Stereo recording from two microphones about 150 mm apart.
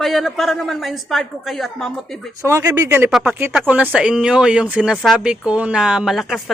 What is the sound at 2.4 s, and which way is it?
A woman's voice, 20° right (ahead or behind).